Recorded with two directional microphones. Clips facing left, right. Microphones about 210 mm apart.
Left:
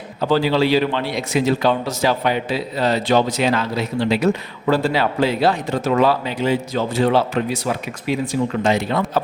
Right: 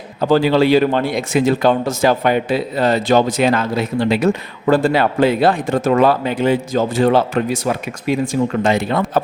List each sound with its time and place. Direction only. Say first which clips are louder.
0.2 s a man's voice: right 4 dB; 50° right (ahead or behind)